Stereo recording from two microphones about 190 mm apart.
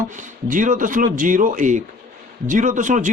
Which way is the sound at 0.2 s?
45° right (ahead or behind).